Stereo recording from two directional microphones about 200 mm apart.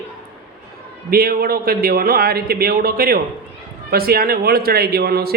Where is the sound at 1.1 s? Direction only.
50° right (ahead or behind).